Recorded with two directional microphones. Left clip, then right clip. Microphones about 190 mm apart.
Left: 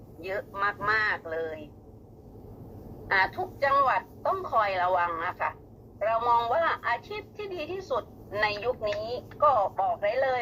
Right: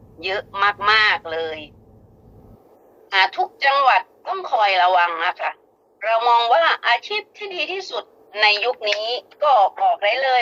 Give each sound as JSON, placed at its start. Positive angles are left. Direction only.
{"t": 0.2, "sound": "a woman's voice", "side_deg": -30}
{"t": 3.1, "sound": "a woman's voice", "side_deg": -30}